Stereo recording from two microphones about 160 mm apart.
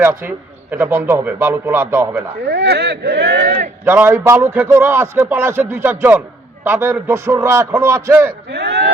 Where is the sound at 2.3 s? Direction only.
90° right.